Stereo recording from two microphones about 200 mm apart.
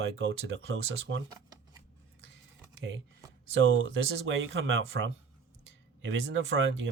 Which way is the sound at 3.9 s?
70° right (ahead or behind).